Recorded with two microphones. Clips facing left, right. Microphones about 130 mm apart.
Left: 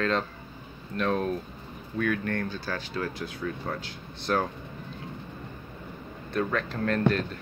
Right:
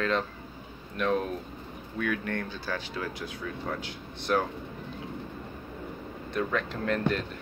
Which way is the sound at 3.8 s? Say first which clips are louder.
Even; 15° right (ahead or behind).